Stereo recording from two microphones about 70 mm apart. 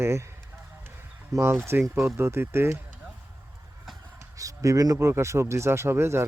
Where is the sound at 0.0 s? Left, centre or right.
Right.